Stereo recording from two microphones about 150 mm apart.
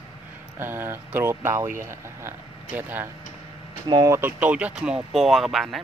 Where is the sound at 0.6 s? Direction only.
15° right (ahead or behind).